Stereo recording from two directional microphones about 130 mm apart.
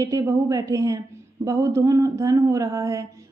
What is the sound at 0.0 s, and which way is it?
A woman's voice, 25° right (ahead or behind).